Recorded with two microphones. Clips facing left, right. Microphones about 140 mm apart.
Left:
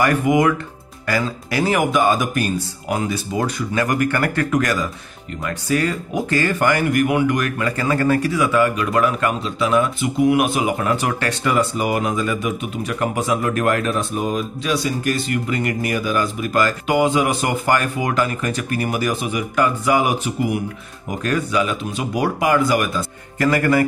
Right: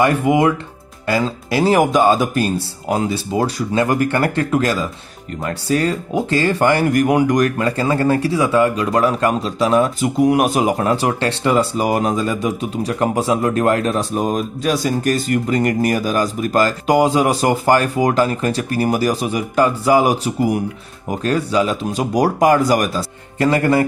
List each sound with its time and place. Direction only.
0.0 s speech: 25° right (ahead or behind)